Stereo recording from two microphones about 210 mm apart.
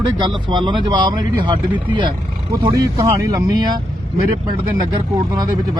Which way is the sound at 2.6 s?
15° right (ahead or behind).